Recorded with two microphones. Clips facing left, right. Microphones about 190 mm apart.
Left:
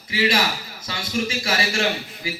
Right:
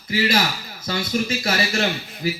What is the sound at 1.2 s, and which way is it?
A man's voice, 40° right (ahead or behind).